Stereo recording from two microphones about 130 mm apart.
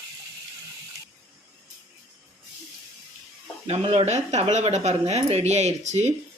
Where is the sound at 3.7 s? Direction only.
55° right (ahead or behind).